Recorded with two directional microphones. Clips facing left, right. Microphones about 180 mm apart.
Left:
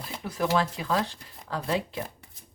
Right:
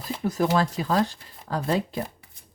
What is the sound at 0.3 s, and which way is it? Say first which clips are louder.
Speech: right 3 dB; 40° right (ahead or behind).